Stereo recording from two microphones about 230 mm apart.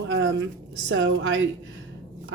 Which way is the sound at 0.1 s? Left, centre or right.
Right.